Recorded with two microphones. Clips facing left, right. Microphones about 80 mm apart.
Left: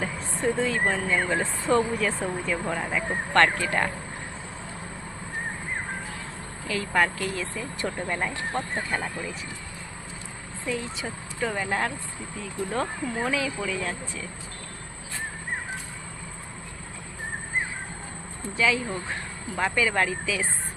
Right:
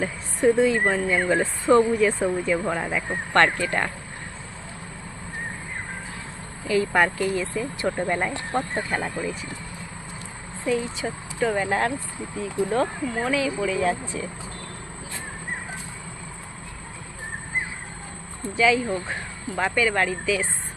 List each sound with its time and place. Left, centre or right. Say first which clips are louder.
0.0 s speech: right 6 dB; centre
2.2 s speech: right 5 dB; centre
2.8 s speech: right 1 dB; centre
6.7 s speech: right 4 dB; centre
10.7 s speech: right 6 dB; centre
12.3 s speech: right 7 dB; centre
12.7 s speech: right 2 dB; centre
13.8 s speech: right 8 dB; right
18.5 s speech: right 5 dB; centre